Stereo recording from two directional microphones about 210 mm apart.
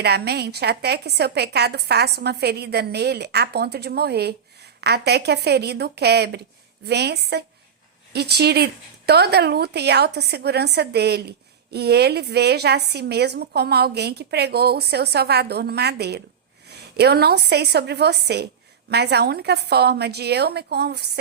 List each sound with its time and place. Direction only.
0.0 s speech: 50° right (ahead or behind)